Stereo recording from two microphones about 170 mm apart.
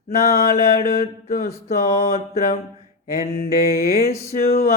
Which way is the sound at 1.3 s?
40° left (ahead or behind).